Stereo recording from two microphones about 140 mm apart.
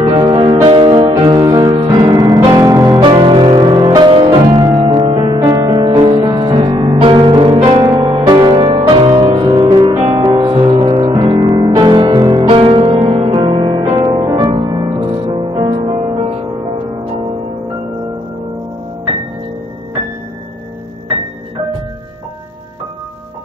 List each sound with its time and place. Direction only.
0.2 s music: 35° right (ahead or behind)
3.0 s music: 35° right (ahead or behind)